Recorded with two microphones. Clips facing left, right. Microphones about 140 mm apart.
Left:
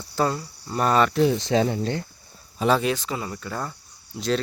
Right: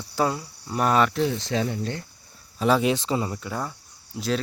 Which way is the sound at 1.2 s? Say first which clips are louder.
Left 5 dB; 20° left (ahead or behind).